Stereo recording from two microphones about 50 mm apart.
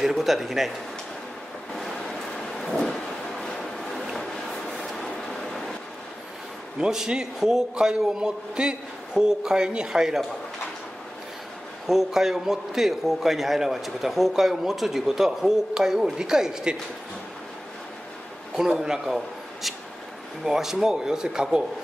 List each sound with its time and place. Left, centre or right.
0.0 s speech: centre
1.7 s a sound: centre
4.2 s train: centre
6.8 s a man's voice: centre
11.9 s a man's voice: centre
18.8 s a man's voice: centre